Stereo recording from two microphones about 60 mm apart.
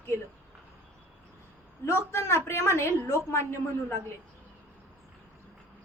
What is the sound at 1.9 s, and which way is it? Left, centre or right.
A woman's voice, left.